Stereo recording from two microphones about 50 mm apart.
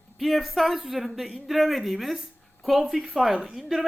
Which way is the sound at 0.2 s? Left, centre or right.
Centre.